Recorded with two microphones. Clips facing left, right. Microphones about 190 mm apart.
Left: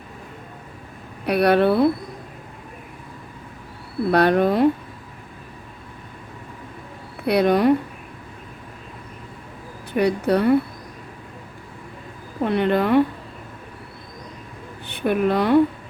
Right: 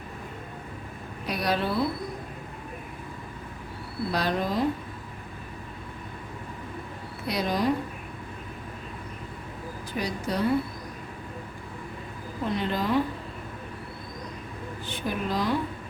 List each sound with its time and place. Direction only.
1.2 s speech: 60° left (ahead or behind)
4.1 s speech: 60° left (ahead or behind)
7.3 s speech: 60° left (ahead or behind)
9.9 s speech: 60° left (ahead or behind)
12.4 s speech: 60° left (ahead or behind)
14.8 s speech: 60° left (ahead or behind)